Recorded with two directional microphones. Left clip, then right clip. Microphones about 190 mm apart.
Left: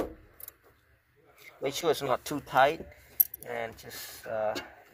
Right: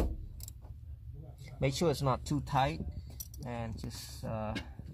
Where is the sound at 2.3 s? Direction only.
45° left (ahead or behind).